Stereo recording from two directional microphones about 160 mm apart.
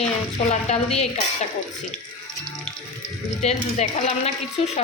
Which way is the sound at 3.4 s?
45° left (ahead or behind).